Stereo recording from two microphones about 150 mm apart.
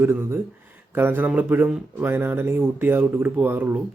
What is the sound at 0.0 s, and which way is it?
Speech, 15° right (ahead or behind).